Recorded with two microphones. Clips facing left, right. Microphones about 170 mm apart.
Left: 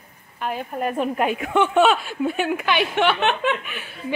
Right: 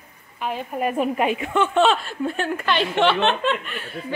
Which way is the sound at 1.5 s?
15° left (ahead or behind).